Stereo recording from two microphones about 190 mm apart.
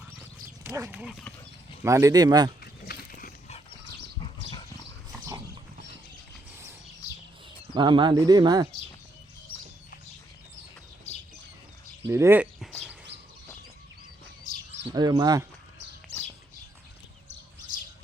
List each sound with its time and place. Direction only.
0.6 s speech: 10° right (ahead or behind)
1.8 s speech: 15° right (ahead or behind)
2.8 s a sound: 50° left (ahead or behind)
4.4 s dog: 25° left (ahead or behind)
7.7 s speech: 25° right (ahead or behind)
12.0 s speech: 15° right (ahead or behind)
12.5 s a sound: centre (ahead or behind)
14.5 s a sound: 40° left (ahead or behind)
14.9 s speech: 20° right (ahead or behind)